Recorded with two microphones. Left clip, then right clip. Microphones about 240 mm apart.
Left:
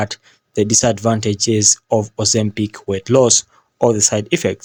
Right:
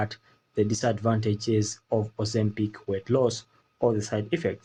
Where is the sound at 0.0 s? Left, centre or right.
Left.